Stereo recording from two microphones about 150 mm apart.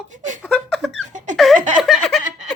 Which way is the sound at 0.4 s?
Centre (ahead or behind).